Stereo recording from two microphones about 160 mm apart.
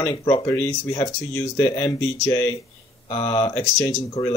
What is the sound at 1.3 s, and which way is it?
Speech, 20° left (ahead or behind).